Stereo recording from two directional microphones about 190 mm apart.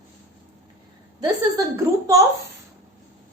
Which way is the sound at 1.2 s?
20° right (ahead or behind).